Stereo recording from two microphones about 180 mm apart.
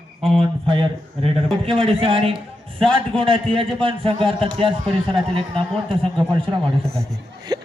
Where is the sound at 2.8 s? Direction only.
5° left (ahead or behind).